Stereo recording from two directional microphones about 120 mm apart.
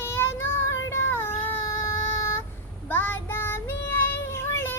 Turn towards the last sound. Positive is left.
turn(degrees=20)  # may be behind; listen again after turning